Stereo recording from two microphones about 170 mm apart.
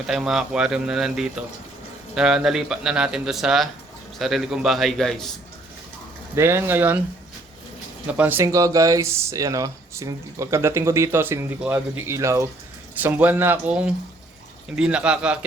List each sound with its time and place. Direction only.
0.1 s speech: centre (ahead or behind)
6.3 s speech: 15° right (ahead or behind)
8.0 s speech: 10° right (ahead or behind)